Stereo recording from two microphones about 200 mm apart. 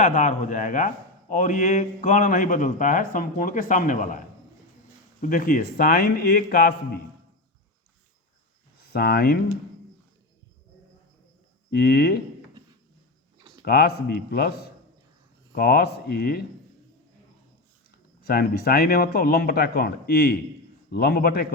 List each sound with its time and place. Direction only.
0.0 s speech: 40° left (ahead or behind)
5.2 s speech: 45° left (ahead or behind)
8.8 s speech: 50° left (ahead or behind)
11.7 s speech: 50° left (ahead or behind)
13.7 s speech: 50° left (ahead or behind)
15.5 s speech: 50° left (ahead or behind)
18.2 s speech: 50° left (ahead or behind)